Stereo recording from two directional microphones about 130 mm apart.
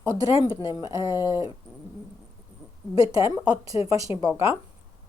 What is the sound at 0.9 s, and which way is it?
Speech, 20° right (ahead or behind).